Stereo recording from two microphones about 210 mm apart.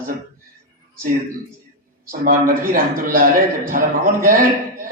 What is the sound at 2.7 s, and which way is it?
A man's voice, 40° right (ahead or behind).